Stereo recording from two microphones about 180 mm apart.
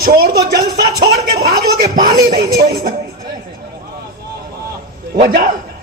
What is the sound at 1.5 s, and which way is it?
Speech, 55° right (ahead or behind).